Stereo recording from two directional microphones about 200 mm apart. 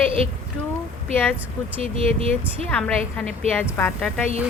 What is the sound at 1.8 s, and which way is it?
Speech, 30° right (ahead or behind).